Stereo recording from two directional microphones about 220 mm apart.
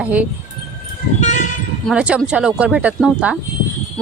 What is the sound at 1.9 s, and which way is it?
Speech, 5° right (ahead or behind).